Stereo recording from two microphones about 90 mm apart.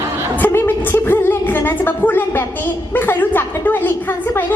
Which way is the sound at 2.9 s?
20° left (ahead or behind).